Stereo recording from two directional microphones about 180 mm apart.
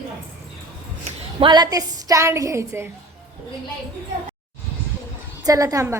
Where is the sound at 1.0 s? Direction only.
30° right (ahead or behind).